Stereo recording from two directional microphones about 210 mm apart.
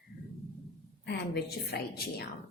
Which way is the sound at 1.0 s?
55° left (ahead or behind).